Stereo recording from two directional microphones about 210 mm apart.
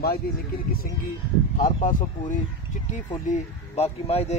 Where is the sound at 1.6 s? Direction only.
40° left (ahead or behind).